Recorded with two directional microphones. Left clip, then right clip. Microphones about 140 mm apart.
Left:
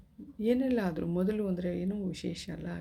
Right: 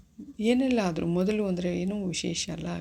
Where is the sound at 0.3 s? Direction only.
15° right (ahead or behind).